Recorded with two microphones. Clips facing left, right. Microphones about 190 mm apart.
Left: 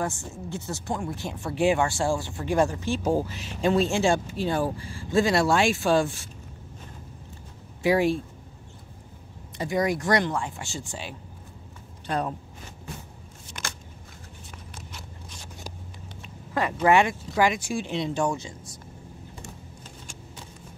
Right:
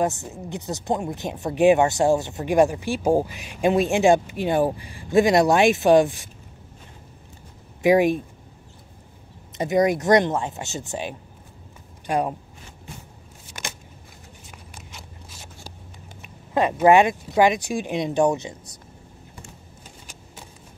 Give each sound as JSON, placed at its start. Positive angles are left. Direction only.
{"t": 0.0, "sound": "speech", "side_deg": -20}
{"t": 7.8, "sound": "speech", "side_deg": -15}
{"t": 9.6, "sound": "speech", "side_deg": -20}
{"t": 16.2, "sound": "vehicle", "side_deg": -20}
{"t": 16.8, "sound": "speech", "side_deg": -20}